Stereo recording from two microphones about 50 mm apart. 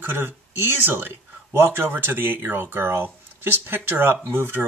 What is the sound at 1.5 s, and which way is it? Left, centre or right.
Speech, right.